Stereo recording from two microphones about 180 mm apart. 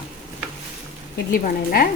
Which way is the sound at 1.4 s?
55° left (ahead or behind).